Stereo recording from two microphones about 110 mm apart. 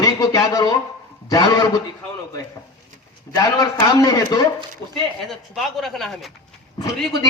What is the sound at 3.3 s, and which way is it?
A man's voice, 35° left (ahead or behind).